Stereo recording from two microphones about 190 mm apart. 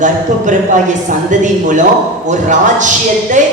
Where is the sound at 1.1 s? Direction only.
40° right (ahead or behind).